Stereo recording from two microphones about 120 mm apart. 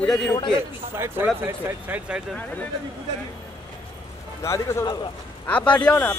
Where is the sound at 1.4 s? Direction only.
15° right (ahead or behind).